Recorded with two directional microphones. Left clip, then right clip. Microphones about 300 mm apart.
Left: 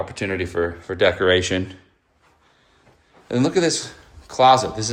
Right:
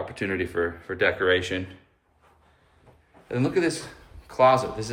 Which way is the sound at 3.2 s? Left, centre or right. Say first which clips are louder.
Left 5 dB; centre.